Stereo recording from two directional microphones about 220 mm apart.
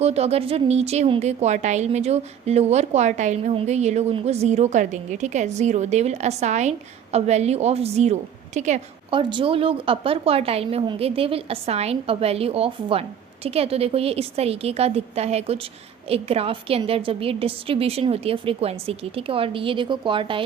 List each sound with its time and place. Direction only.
0.0 s speech: 30° right (ahead or behind)